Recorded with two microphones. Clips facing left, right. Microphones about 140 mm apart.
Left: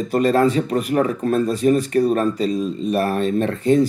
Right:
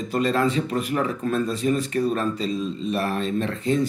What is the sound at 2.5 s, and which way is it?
Mantra, 10° left (ahead or behind).